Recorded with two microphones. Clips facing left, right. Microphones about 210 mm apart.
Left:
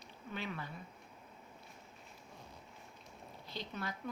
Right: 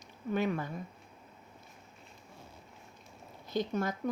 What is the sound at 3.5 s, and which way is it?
Speech, 45° right (ahead or behind).